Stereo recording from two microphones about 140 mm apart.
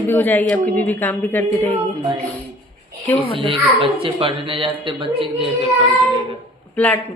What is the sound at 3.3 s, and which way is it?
Speech, 40° right (ahead or behind).